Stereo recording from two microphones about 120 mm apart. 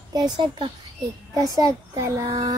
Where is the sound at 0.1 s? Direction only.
40° right (ahead or behind).